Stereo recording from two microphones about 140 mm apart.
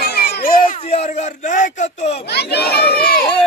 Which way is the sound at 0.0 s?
90° left.